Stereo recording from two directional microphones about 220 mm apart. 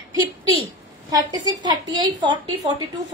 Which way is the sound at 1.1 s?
20° right (ahead or behind).